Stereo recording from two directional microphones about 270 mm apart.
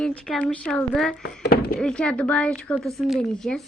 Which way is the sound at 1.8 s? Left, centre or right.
Centre.